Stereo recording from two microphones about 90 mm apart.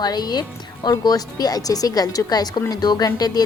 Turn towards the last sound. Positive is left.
turn(degrees=45)  # may be behind; listen again after turning